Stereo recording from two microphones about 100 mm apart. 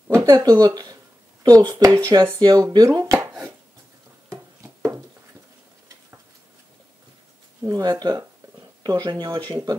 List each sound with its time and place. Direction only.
0.1 s speech: 30° right (ahead or behind)
1.8 s speech: 30° right (ahead or behind)
7.6 s speech: 35° right (ahead or behind)